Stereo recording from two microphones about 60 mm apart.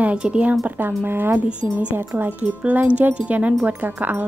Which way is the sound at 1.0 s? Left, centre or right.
Right.